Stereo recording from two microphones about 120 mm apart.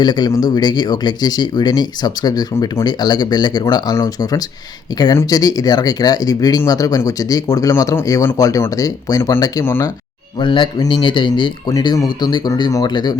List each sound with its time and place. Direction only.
0.0 s speech: 35° left (ahead or behind)
10.3 s speech: 40° left (ahead or behind)